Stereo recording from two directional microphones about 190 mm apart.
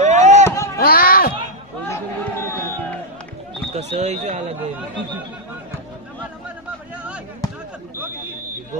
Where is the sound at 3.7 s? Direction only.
35° right (ahead or behind).